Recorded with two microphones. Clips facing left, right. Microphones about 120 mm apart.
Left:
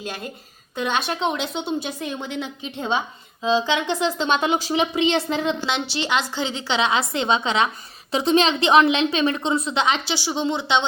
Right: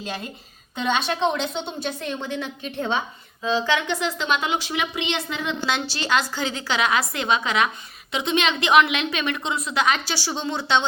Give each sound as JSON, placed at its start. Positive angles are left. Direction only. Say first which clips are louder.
{"t": 0.9, "sound": "a woman's voice", "louder": "even", "side_deg": 10}
{"t": 5.9, "sound": "a woman's voice", "louder": "even", "side_deg": 20}